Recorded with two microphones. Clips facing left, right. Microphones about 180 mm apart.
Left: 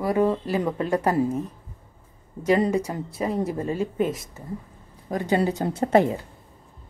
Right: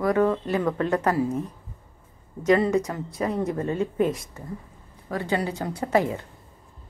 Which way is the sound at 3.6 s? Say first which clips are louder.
Right 1 dB; 5° left (ahead or behind).